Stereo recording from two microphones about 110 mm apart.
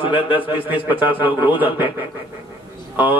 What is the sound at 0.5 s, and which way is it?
A man's voice, 15° right (ahead or behind).